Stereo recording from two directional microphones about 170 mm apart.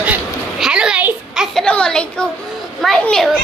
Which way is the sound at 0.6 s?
5° right (ahead or behind).